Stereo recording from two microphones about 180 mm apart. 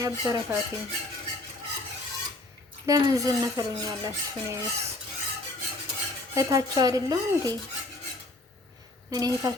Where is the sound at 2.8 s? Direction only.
20° right (ahead or behind).